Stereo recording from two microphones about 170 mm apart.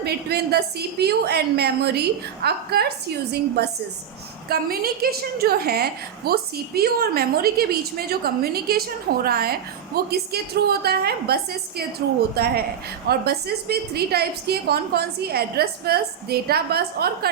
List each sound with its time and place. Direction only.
0.0 s a woman's voice: 70° right (ahead or behind)
12.4 s a woman's voice: 65° right (ahead or behind)